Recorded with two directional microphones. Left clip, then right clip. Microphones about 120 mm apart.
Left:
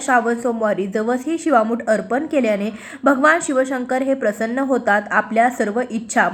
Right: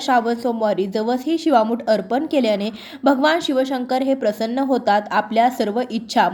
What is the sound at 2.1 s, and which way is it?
Speech, 50° right (ahead or behind).